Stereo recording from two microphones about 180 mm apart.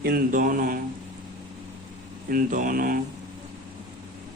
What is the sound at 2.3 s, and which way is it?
Speech, 50° right (ahead or behind).